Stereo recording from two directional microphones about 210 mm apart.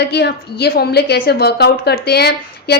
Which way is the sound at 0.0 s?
50° left (ahead or behind).